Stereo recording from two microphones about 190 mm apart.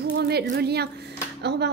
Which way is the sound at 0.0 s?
55° right (ahead or behind).